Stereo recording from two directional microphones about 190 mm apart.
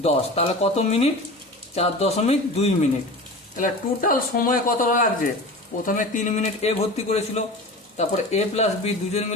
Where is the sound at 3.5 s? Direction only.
45° left (ahead or behind).